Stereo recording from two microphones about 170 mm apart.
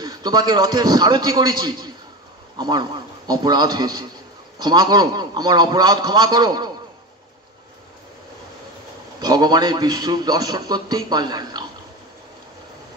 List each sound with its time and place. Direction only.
0.0 s a man's voice: 25° right (ahead or behind)
9.2 s a man's voice: 25° right (ahead or behind)